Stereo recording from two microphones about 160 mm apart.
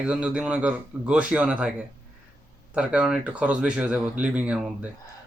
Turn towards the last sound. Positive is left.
turn(degrees=-10)  # may be behind; listen again after turning